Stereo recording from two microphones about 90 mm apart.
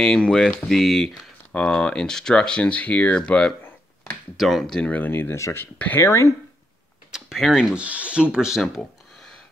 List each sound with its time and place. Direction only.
0.0 s speech: 10° left (ahead or behind); by 6.3 s 30° left (ahead or behind)
7.1 s a sound: 5° right (ahead or behind)
7.7 s speech: 15° right (ahead or behind)